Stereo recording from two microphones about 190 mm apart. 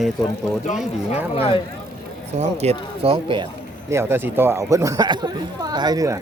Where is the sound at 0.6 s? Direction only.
40° left (ahead or behind).